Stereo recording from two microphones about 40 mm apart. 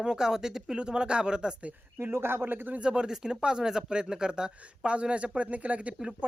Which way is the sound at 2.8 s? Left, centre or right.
Right.